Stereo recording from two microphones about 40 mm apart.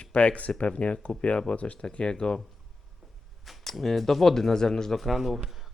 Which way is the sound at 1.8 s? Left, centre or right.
Left.